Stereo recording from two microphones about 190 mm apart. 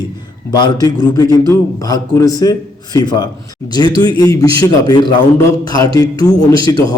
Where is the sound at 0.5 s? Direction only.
20° left (ahead or behind).